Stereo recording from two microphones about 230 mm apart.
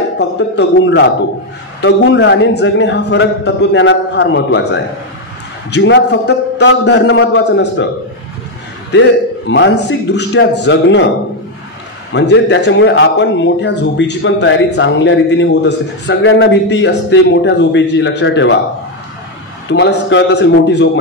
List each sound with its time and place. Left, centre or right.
0.2 s a man's voice: left
9.5 s a man's voice: left
12.1 s a man's voice: left
19.7 s a man's voice: left